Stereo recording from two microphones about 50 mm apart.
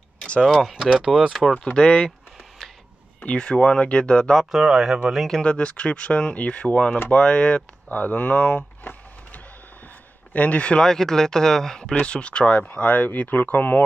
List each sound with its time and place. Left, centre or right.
0.3 s speech: centre
0.9 s speech: centre
1.5 s speech: left
3.3 s speech: left
4.4 s speech: centre
5.4 s speech: left
7.9 s a sound: left
10.3 s speech: left
10.8 s speech: centre; by 13.8 s left